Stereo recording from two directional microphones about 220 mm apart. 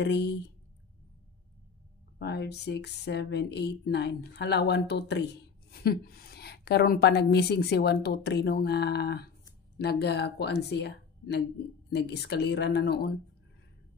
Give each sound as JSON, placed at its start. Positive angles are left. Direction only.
{"t": 0.0, "sound": "speech", "side_deg": 50}
{"t": 2.1, "sound": "speech", "side_deg": 50}